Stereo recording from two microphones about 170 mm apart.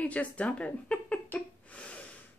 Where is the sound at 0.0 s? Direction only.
10° left (ahead or behind).